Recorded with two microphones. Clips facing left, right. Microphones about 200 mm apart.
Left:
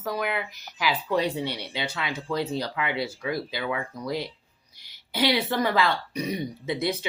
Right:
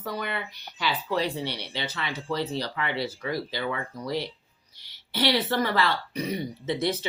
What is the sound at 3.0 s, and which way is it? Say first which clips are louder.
Speech: left 1 dB; 10° left (ahead or behind).